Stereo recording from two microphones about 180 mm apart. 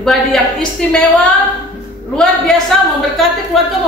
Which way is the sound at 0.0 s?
5° left (ahead or behind).